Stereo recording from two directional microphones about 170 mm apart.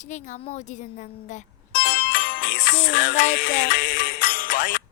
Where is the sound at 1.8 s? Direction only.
75° left (ahead or behind).